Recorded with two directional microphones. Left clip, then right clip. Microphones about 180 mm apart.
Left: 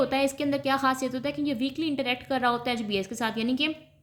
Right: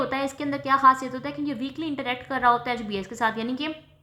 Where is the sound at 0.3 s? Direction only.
30° left (ahead or behind).